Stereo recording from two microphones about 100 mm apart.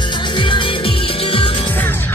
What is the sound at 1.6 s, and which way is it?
Music, 20° left (ahead or behind).